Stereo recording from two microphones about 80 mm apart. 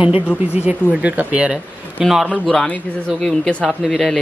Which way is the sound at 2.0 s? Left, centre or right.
Centre.